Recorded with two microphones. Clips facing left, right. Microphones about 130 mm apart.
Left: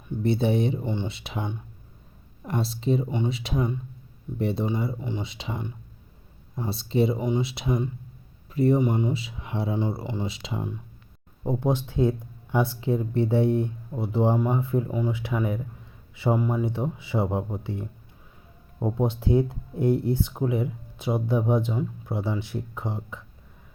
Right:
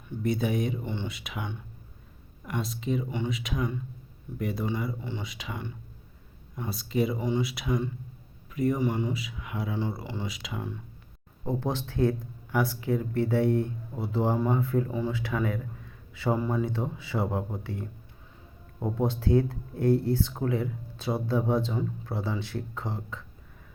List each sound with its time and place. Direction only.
0.2 s a man's voice: 30° left (ahead or behind)